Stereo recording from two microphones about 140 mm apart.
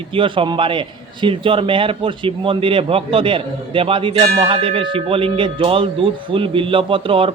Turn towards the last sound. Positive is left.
turn(degrees=-40)  # may be behind; listen again after turning